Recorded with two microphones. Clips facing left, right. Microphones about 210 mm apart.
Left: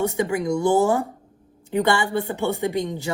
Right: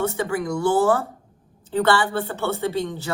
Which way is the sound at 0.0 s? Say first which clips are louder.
Left 1 dB; 15° left (ahead or behind).